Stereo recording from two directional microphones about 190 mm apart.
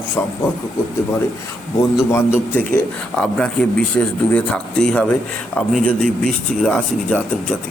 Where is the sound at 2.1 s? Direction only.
10° left (ahead or behind).